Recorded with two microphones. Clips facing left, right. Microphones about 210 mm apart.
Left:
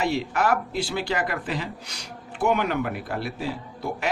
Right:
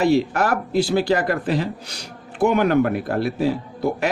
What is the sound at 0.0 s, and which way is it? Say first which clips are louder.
Speech: right 6 dB; 40° right (ahead or behind).